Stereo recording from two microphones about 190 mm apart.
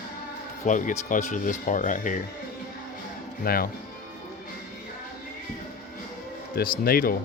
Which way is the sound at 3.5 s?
50° left (ahead or behind).